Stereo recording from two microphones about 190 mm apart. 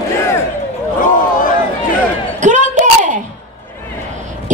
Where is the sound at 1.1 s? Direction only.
45° left (ahead or behind).